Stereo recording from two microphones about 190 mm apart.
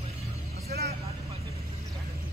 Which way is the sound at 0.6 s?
55° right (ahead or behind).